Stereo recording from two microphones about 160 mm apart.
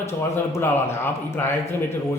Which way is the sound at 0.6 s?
15° left (ahead or behind).